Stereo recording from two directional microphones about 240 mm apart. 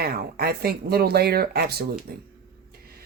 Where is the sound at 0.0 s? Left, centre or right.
Right.